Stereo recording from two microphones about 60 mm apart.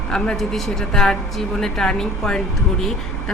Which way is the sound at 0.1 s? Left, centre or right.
Centre.